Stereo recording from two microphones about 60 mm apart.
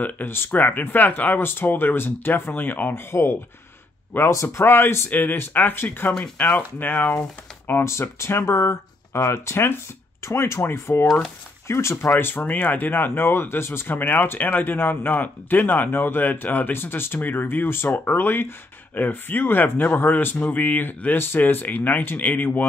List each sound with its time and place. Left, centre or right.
0.0 s speech: left
0.5 s speech: left
4.3 s speech: left
4.6 s speech: left
7.8 s speech: left
12.2 s speech: left